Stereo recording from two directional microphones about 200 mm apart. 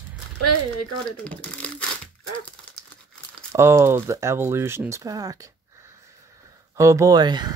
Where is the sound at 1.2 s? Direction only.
5° left (ahead or behind).